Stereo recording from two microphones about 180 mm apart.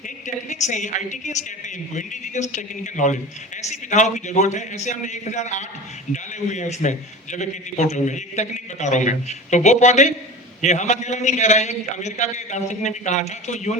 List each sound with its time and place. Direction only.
0.5 s a man's voice: 40° left (ahead or behind)